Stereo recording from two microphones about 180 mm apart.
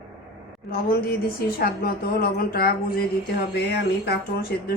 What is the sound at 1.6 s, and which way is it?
Speech, 55° left (ahead or behind).